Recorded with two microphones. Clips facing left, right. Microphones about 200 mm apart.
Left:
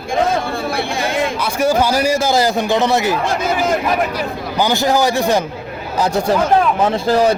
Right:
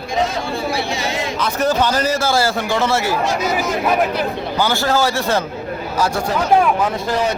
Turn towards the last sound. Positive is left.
turn(degrees=30)  # may be behind; listen again after turning